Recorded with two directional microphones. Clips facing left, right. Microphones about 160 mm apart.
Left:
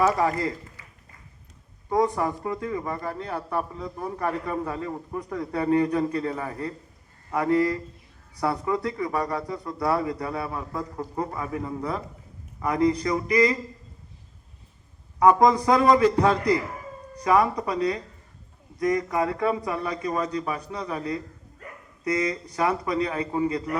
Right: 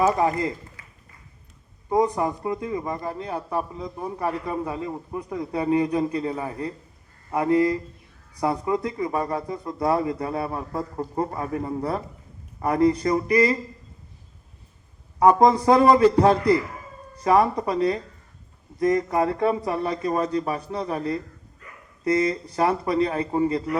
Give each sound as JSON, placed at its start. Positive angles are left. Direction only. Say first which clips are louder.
{"t": 0.1, "sound": "speech", "louder": "right 2 dB", "side_deg": -20}
{"t": 1.9, "sound": "a man's voice", "louder": "right 2 dB", "side_deg": -20}
{"t": 13.1, "sound": "speech", "louder": "right 2 dB", "side_deg": -30}
{"t": 15.2, "sound": "a man's voice", "louder": "right 1 dB", "side_deg": -30}
{"t": 22.0, "sound": "a man's voice", "louder": "right 4 dB", "side_deg": -30}